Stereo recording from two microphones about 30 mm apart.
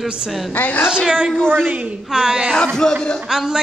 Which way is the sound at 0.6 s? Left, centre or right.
Left.